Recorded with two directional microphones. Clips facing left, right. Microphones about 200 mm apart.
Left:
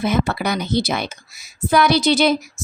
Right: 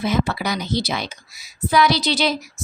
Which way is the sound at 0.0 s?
55° left (ahead or behind).